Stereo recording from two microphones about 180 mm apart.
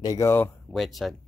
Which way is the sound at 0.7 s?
Centre (ahead or behind).